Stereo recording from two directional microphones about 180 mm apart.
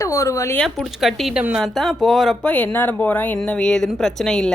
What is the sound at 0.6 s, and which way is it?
A woman's voice, centre (ahead or behind).